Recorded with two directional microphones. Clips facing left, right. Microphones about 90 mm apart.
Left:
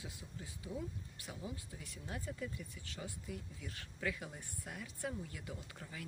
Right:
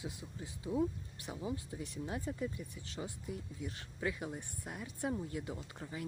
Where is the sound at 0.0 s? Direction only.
25° right (ahead or behind).